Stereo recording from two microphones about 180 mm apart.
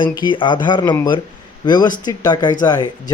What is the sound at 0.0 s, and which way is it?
Speech, 25° left (ahead or behind).